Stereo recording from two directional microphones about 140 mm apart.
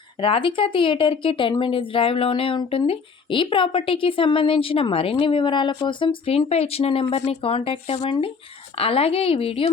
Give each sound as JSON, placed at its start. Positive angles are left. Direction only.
{"t": 0.2, "sound": "a woman's voice", "side_deg": 40}